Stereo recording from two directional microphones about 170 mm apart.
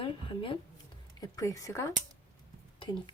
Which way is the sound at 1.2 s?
20° left (ahead or behind).